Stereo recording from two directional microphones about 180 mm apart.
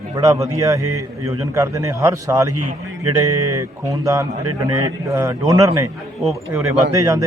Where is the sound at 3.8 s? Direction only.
15° right (ahead or behind).